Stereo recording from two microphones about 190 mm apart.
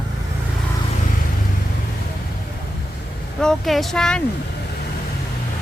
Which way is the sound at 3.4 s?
Centre (ahead or behind).